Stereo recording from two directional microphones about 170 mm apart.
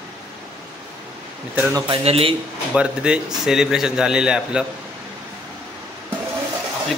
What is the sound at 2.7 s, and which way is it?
A man's voice, 5° right (ahead or behind).